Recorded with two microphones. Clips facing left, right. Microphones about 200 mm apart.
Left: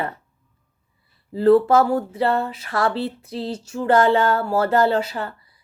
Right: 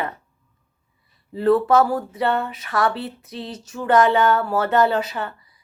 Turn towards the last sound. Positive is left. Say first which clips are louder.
# left 1 dB
turn(degrees=30)  # may be behind; listen again after turning